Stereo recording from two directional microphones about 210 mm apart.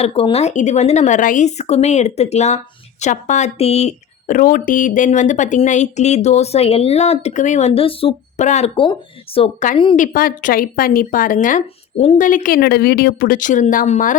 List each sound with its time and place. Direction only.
0.0 s a woman's voice: 25° left (ahead or behind)
10.0 s speech: 40° left (ahead or behind)